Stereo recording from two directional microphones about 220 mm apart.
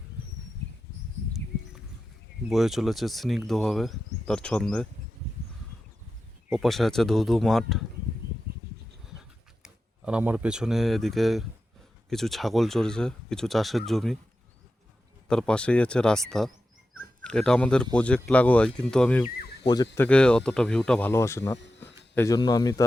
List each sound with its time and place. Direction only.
2.5 s speech: centre (ahead or behind)
6.5 s speech: centre (ahead or behind)
9.6 s speech: 5° right (ahead or behind)
15.3 s speech: 5° left (ahead or behind)
19.6 s speech: 20° left (ahead or behind)
20.1 s speech: 5° left (ahead or behind)